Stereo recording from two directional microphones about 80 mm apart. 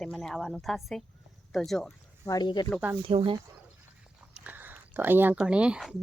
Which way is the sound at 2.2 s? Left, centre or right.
Left.